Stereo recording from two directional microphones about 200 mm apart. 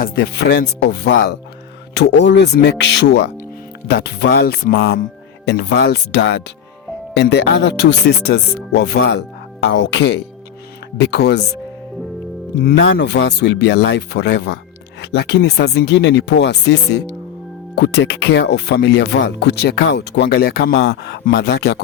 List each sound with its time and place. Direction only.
0.0 s speech: 50° left (ahead or behind)
12.5 s speech: 50° left (ahead or behind)